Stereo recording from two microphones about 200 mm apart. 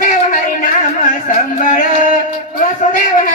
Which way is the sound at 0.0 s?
40° left (ahead or behind).